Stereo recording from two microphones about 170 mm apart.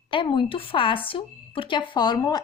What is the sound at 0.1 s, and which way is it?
Speech, 30° left (ahead or behind).